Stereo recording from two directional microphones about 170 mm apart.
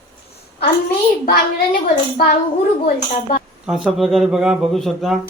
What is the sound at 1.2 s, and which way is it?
Speech, 55° left (ahead or behind).